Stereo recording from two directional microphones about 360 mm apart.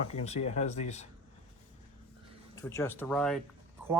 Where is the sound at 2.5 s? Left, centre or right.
Centre.